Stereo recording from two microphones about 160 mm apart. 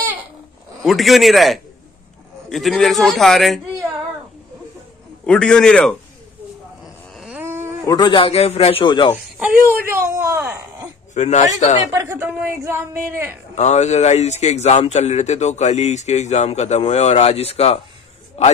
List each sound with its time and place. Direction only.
0.8 s a man's voice: centre (ahead or behind)
5.2 s a man's voice: 5° left (ahead or behind)
7.2 s a sound: 10° right (ahead or behind)
7.8 s a man's voice: 25° left (ahead or behind)
9.4 s a woman's voice: 10° right (ahead or behind)
11.1 s a man's voice: 45° left (ahead or behind)
11.9 s a woman's voice: 15° right (ahead or behind)
13.6 s a man's voice: 45° left (ahead or behind)